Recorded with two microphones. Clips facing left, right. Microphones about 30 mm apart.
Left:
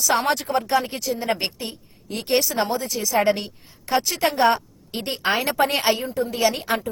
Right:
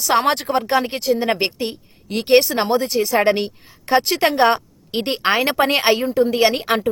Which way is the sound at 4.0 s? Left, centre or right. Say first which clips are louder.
Right 4 dB; right.